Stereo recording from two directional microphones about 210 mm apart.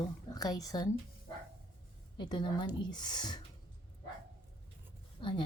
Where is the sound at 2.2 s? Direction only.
20° left (ahead or behind).